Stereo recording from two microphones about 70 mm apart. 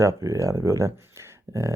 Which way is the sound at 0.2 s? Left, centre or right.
Right.